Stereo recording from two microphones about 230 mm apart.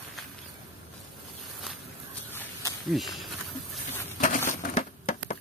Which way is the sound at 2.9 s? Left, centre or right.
Centre.